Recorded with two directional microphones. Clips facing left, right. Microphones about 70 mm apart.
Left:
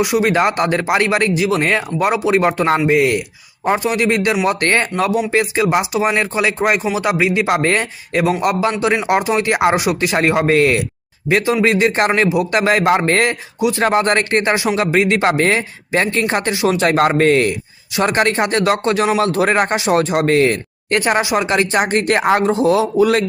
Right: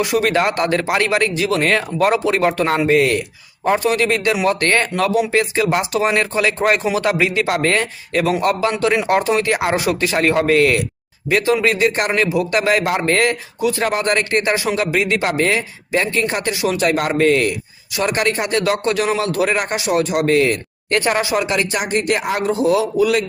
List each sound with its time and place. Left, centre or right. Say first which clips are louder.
0.2 s speech: left 1 dB; centre
8.3 s speech: even; centre
13.8 s speech: left 6 dB; left
20.9 s speech: left 2 dB; left
21.4 s speech: left 4 dB; left
22.4 s speech: left 2 dB; left